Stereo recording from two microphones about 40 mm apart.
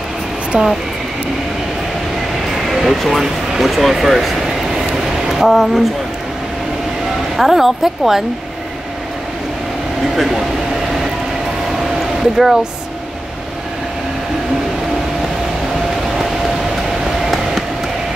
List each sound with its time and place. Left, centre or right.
0.5 s speech: right
2.5 s a sound: centre
3.5 s vehicle: centre
7.3 s speech: centre
10.1 s speech: centre
12.2 s speech: centre